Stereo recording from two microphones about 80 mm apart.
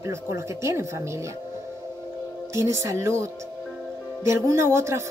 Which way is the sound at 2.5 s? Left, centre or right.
Right.